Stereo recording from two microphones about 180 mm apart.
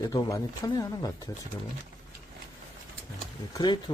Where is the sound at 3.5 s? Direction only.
25° left (ahead or behind).